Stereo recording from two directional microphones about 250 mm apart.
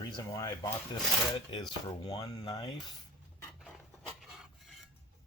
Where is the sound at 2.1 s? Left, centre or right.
Left.